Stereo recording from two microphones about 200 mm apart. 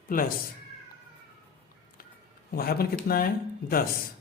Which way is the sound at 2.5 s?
50° left (ahead or behind).